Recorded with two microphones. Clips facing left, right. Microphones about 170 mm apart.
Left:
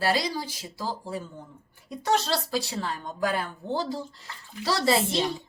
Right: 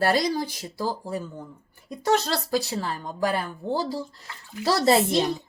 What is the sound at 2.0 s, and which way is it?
A woman's voice, 45° right (ahead or behind).